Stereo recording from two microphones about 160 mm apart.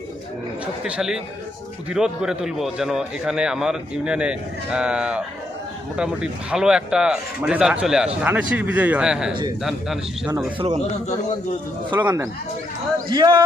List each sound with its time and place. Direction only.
0.6 s speech: 5° right (ahead or behind)
11.9 s speech: 15° right (ahead or behind)
13.1 s speech: 30° right (ahead or behind)